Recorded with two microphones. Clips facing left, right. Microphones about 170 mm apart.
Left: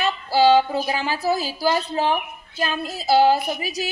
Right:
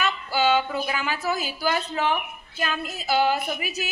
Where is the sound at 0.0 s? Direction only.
35° left (ahead or behind).